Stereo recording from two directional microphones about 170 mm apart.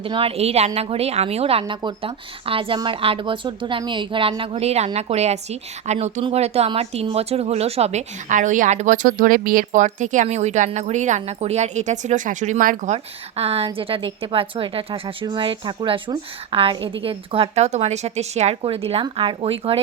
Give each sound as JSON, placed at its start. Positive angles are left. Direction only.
{"t": 0.0, "sound": "a woman's voice", "side_deg": -30}